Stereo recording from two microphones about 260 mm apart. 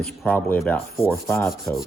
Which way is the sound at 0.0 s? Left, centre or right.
Centre.